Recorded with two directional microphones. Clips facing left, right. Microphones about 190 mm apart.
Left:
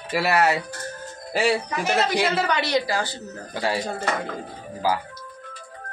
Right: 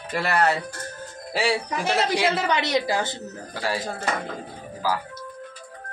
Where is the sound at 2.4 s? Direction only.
20° right (ahead or behind).